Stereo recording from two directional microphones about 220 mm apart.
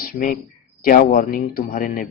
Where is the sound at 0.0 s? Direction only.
40° left (ahead or behind).